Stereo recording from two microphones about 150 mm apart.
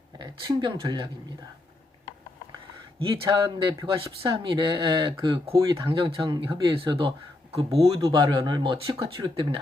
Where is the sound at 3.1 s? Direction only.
30° right (ahead or behind).